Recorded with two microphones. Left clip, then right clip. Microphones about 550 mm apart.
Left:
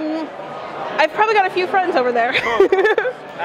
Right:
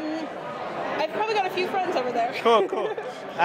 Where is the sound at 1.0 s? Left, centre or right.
Left.